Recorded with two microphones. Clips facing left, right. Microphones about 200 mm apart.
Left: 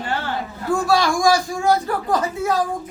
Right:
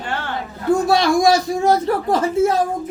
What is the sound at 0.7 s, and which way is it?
A man's voice, 20° right (ahead or behind).